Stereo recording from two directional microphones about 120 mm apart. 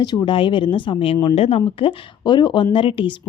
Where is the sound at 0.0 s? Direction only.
35° left (ahead or behind).